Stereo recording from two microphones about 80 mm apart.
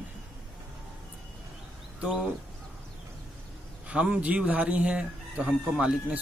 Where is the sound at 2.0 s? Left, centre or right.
Centre.